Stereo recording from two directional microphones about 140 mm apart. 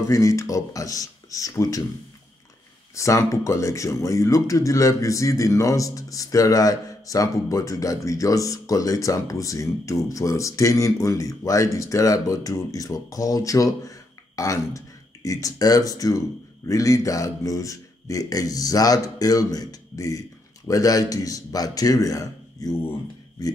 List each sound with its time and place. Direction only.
0.0 s speech: 20° left (ahead or behind)
2.9 s speech: 20° left (ahead or behind)